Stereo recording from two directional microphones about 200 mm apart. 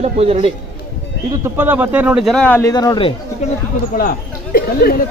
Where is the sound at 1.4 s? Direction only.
10° right (ahead or behind); by 3.1 s 25° left (ahead or behind).